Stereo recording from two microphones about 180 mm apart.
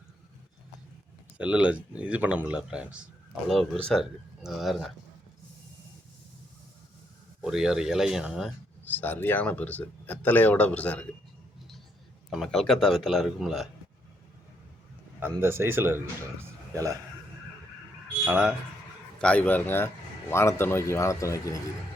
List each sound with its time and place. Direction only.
1.4 s a man's voice: 5° right (ahead or behind)
7.4 s a man's voice: 5° right (ahead or behind)
8.8 s speech: 10° left (ahead or behind)
12.3 s a man's voice: centre (ahead or behind)
15.2 s speech: 15° right (ahead or behind)
18.3 s speech: 10° right (ahead or behind)
19.2 s speech: 10° left (ahead or behind)